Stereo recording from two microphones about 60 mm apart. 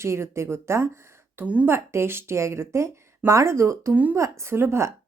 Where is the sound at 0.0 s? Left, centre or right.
Right.